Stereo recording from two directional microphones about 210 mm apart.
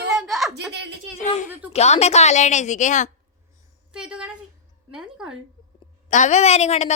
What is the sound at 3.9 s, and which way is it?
A woman's voice, 5° right (ahead or behind).